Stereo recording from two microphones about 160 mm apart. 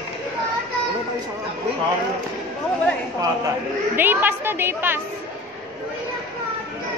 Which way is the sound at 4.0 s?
10° right (ahead or behind).